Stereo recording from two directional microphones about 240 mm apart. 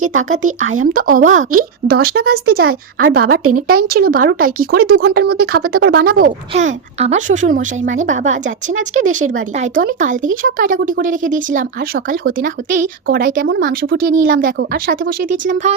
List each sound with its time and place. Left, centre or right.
0.2 s speech: right
0.9 s speech: right
3.4 s speech: right
3.8 s speech: right
8.7 s speech: right
9.3 s speech: right